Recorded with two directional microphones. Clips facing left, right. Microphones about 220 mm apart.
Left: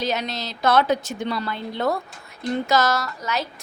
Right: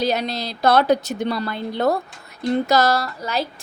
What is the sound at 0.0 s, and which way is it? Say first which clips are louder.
A woman's voice: right 4 dB; 35° right (ahead or behind).